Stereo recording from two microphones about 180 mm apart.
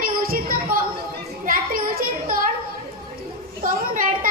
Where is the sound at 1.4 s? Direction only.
50° right (ahead or behind).